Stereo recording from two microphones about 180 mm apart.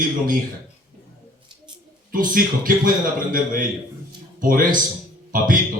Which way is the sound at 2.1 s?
50° right (ahead or behind).